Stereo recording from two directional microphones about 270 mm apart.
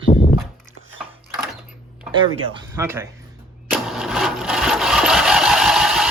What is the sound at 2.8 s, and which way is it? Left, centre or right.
Speech, centre.